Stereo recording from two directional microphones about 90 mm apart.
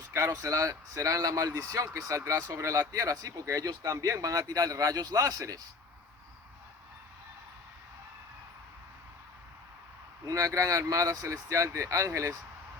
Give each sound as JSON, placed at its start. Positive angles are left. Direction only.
{"t": 0.1, "sound": "speech", "side_deg": -35}
{"t": 10.2, "sound": "speech", "side_deg": -35}